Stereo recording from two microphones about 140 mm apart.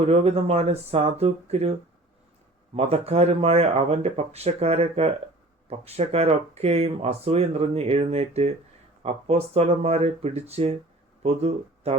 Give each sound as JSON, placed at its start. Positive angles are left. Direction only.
{"t": 0.0, "sound": "speech", "side_deg": -45}
{"t": 3.1, "sound": "speech", "side_deg": -50}